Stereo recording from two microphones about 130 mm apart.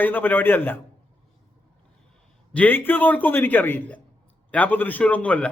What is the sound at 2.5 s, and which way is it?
A man's voice, 10° left (ahead or behind).